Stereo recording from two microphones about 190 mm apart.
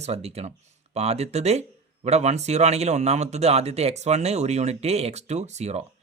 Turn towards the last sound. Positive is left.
turn(degrees=-35)  # may be behind; listen again after turning